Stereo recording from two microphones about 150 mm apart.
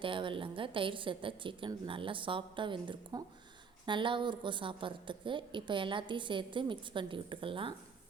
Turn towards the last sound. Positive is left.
turn(degrees=-35)  # may be behind; listen again after turning